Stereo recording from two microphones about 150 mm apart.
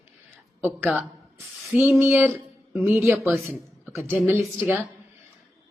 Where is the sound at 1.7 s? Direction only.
10° right (ahead or behind).